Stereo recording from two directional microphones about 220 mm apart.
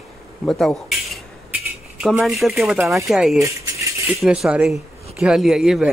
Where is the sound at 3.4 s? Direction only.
15° right (ahead or behind).